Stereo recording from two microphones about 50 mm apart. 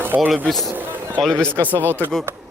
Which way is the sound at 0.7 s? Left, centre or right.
Right.